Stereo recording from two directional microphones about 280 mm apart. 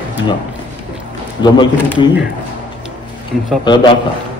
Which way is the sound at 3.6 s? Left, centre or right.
Centre.